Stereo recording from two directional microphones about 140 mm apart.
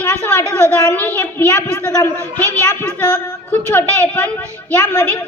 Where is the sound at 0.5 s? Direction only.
10° left (ahead or behind).